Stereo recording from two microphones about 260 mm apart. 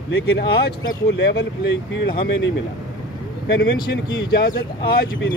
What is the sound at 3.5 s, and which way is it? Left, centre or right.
Speech, left.